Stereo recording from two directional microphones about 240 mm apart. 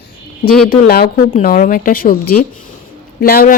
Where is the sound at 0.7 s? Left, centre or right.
Left.